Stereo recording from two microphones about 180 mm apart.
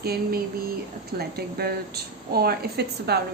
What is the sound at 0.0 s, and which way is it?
A woman's voice, 60° right (ahead or behind).